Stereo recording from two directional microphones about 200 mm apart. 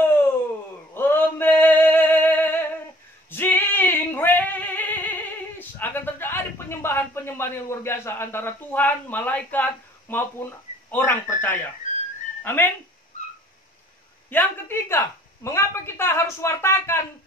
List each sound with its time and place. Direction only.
0.0 s a sound: 10° left (ahead or behind)
0.9 s male singing: 10° left (ahead or behind)
3.3 s singing: 10° left (ahead or behind)
5.6 s speech: 10° left (ahead or behind)
11.9 s music: 35° left (ahead or behind)
12.4 s a woman's voice: 10° left (ahead or behind)
14.3 s a woman's voice: 10° left (ahead or behind)